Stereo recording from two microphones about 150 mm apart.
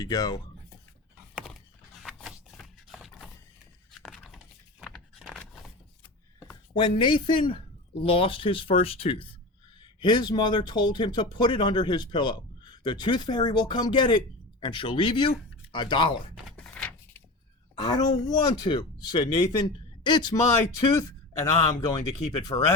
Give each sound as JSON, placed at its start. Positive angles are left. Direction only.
{"t": 0.0, "sound": "speech", "side_deg": 25}
{"t": 2.0, "sound": "a sound", "side_deg": 0}
{"t": 7.0, "sound": "speech", "side_deg": 35}
{"t": 16.5, "sound": "door", "side_deg": 5}
{"t": 17.7, "sound": "speech", "side_deg": 25}